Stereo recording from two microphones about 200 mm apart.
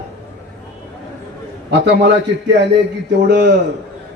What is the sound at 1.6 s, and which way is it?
Speech, 55° right (ahead or behind).